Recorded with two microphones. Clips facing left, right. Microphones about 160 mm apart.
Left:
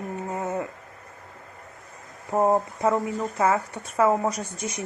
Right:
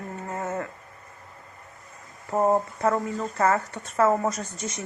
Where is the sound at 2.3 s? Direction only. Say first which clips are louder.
Left 1 dB; 15° left (ahead or behind).